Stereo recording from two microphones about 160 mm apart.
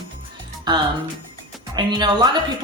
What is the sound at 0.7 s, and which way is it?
A woman's voice, 25° right (ahead or behind).